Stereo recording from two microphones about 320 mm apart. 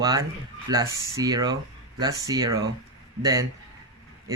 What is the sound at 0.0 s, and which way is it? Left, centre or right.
Speech, centre.